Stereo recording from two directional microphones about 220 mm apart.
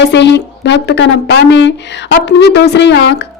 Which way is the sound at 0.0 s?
50° left (ahead or behind).